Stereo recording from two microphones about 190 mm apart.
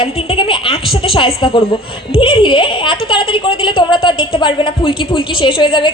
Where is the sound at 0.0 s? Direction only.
30° left (ahead or behind).